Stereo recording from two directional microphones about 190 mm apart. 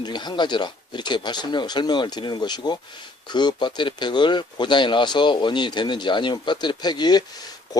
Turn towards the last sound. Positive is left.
turn(degrees=20)  # may be behind; listen again after turning